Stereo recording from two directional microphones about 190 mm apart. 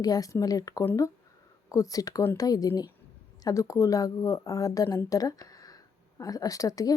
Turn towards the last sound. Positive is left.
turn(degrees=15)  # may be behind; listen again after turning